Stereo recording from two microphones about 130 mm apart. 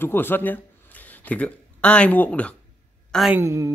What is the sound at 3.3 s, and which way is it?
Speech, 25° right (ahead or behind).